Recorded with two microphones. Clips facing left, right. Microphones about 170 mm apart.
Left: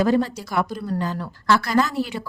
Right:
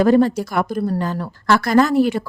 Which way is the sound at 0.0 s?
50° right (ahead or behind).